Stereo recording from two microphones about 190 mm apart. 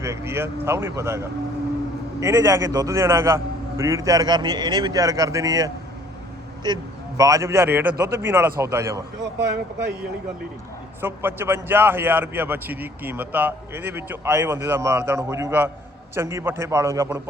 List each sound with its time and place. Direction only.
0.0 s a man's voice: 15° right (ahead or behind)
11.0 s a man's voice: 10° right (ahead or behind)